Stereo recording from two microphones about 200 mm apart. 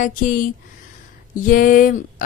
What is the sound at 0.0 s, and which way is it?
Speech, 40° left (ahead or behind).